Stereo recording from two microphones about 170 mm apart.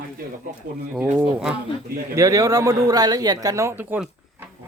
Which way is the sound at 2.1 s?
20° right (ahead or behind).